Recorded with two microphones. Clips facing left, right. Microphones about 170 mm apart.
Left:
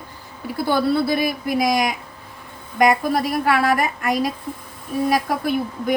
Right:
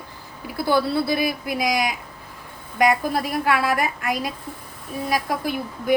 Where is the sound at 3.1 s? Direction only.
5° right (ahead or behind).